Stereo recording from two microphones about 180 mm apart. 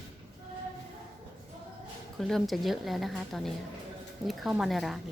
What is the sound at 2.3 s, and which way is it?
A woman's voice, centre (ahead or behind).